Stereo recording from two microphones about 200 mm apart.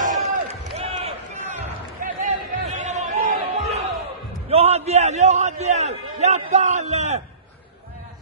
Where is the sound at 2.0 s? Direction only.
40° right (ahead or behind).